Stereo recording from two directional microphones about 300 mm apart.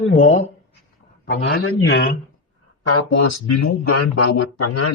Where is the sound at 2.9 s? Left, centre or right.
Left.